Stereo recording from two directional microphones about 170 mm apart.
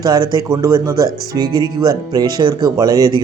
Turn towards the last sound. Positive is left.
turn(degrees=-20)  # may be behind; listen again after turning